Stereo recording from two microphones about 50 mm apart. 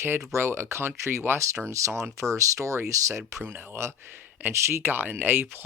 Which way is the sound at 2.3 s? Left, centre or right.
Right.